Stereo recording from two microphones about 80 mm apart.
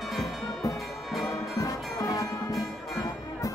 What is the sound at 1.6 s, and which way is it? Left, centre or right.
Music, left.